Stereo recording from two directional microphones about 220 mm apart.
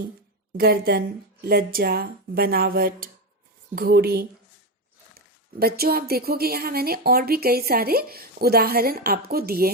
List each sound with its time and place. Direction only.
0.5 s speech: 45° right (ahead or behind)